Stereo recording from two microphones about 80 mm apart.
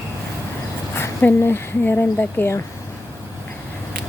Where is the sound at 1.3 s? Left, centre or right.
Left.